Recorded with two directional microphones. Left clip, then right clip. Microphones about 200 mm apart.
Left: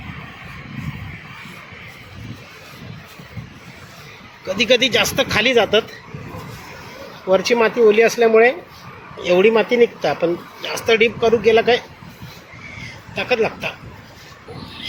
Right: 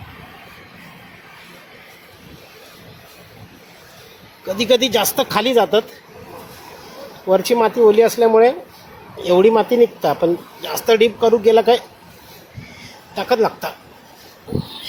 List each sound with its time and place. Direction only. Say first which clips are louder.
4.4 s speech: even; 10° right (ahead or behind)
7.3 s speech: right 1 dB; 10° right (ahead or behind)
13.1 s speech: right 2 dB; 15° right (ahead or behind)